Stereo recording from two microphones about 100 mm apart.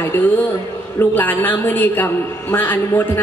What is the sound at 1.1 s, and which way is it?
A woman's voice, 20° left (ahead or behind).